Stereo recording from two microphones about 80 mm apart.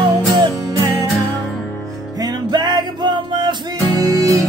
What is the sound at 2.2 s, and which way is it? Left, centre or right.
Music, right.